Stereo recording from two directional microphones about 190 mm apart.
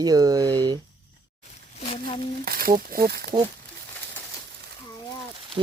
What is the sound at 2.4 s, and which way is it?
Speech, 50° right (ahead or behind).